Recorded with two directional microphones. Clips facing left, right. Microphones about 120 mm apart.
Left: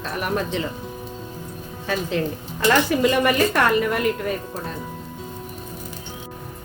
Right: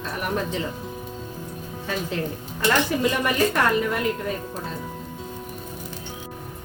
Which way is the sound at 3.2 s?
70° left (ahead or behind).